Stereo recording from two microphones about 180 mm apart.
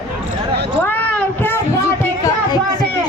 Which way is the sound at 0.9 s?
10° left (ahead or behind).